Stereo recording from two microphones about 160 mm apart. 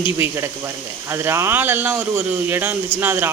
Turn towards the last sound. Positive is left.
turn(degrees=-15)  # may be behind; listen again after turning